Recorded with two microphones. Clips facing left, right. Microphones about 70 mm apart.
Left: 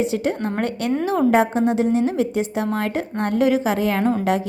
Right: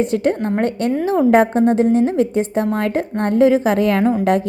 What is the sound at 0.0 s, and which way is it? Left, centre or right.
A woman's voice, right.